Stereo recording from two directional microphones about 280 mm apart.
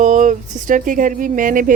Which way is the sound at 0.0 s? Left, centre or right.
Right.